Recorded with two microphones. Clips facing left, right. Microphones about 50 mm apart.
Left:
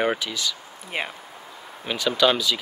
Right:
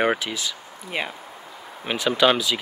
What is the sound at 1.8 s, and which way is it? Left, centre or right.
Speech, centre.